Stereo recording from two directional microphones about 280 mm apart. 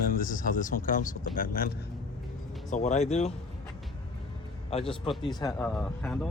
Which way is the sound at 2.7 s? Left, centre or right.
Left.